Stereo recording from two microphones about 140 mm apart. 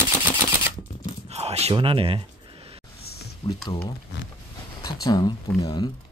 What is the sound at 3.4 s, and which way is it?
Speech, 45° left (ahead or behind).